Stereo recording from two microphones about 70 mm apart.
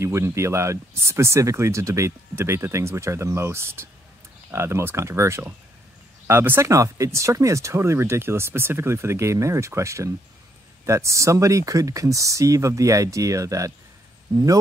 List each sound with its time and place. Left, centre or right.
0.0 s speech: right
6.2 s speech: right
6.7 s speech: right